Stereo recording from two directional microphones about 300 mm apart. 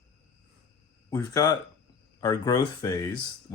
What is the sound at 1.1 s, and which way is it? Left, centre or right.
Speech, centre.